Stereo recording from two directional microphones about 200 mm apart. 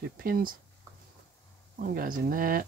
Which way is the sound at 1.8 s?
45° right (ahead or behind).